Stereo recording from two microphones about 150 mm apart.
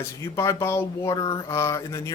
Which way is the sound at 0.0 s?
20° left (ahead or behind).